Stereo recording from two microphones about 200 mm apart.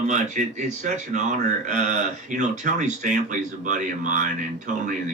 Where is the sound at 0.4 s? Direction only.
40° right (ahead or behind).